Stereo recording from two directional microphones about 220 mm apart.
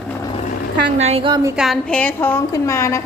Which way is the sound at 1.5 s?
Centre (ahead or behind).